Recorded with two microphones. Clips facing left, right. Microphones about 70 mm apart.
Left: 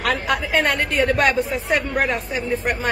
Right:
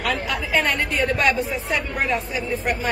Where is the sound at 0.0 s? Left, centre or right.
Left.